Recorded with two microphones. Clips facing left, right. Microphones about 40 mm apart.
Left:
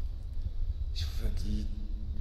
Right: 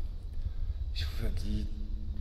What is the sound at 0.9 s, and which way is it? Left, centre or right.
Speech, centre.